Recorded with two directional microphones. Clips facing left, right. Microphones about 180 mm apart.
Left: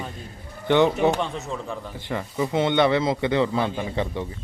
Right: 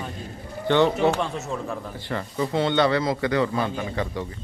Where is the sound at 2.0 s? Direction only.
15° left (ahead or behind).